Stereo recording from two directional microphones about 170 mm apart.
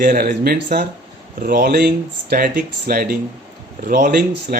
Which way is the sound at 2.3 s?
55° right (ahead or behind).